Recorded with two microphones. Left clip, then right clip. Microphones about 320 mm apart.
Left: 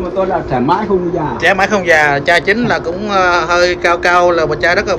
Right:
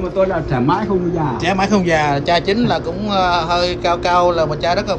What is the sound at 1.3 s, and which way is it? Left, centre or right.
A man's voice, centre.